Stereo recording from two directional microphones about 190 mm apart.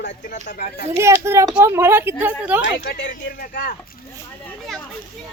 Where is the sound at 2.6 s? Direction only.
70° left (ahead or behind).